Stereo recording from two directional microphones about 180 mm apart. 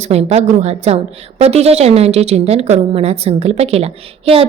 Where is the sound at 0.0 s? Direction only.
35° right (ahead or behind).